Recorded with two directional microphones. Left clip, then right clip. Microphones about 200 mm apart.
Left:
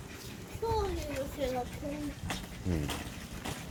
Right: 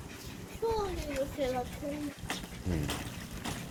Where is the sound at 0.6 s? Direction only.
30° left (ahead or behind).